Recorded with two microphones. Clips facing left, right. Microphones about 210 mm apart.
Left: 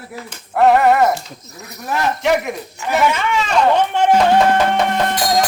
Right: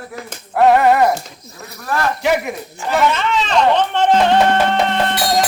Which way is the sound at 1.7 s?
20° left (ahead or behind).